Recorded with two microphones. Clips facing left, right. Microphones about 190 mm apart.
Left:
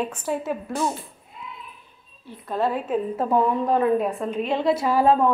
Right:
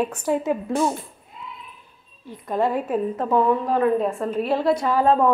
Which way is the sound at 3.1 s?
10° left (ahead or behind).